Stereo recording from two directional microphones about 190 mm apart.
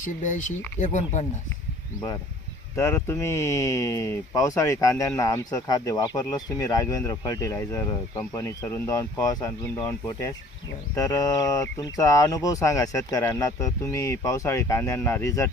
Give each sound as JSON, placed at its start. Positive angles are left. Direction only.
{"t": 0.0, "sound": "speech", "side_deg": 40}
{"t": 2.7, "sound": "speech", "side_deg": 15}